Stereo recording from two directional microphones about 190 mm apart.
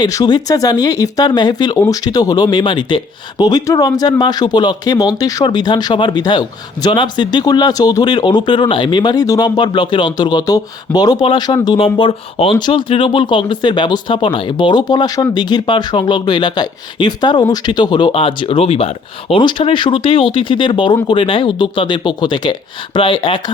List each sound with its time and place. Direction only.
0.0 s speech: 20° left (ahead or behind)